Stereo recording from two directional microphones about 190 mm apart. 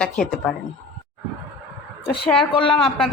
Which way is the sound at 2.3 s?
25° left (ahead or behind).